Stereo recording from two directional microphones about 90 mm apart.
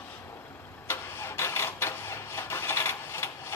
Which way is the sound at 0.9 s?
30° left (ahead or behind).